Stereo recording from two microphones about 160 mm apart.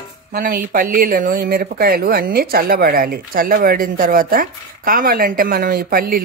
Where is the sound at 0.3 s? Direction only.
65° right (ahead or behind).